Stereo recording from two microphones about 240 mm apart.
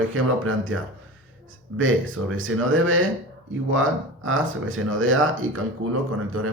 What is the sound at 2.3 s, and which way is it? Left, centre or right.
Speech, right.